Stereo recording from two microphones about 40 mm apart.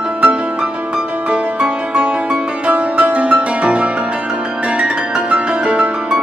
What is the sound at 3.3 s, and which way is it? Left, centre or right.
Piano, right.